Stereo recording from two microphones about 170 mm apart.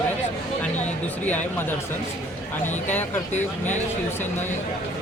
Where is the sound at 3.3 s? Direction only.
45° left (ahead or behind).